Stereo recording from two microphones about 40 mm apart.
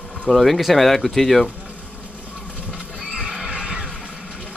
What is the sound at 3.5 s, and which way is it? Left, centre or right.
Music, right.